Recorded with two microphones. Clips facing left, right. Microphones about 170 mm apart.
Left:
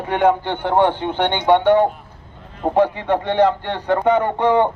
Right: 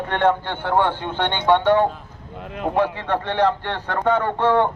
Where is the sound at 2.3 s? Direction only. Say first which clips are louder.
Left 1 dB; 80° right.